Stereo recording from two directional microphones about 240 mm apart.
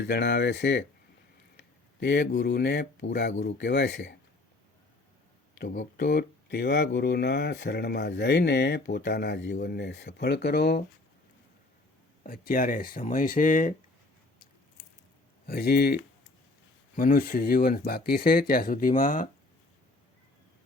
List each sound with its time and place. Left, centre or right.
0.0 s speech: left
1.5 s a sound: left
2.3 s speech: left
5.5 s speech: left
12.2 s speech: left
15.4 s speech: left
17.0 s speech: left